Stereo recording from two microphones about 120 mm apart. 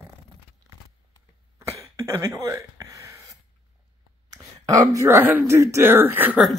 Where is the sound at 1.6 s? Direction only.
25° right (ahead or behind).